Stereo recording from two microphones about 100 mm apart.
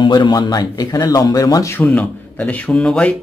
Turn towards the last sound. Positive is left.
turn(degrees=10)  # may be behind; listen again after turning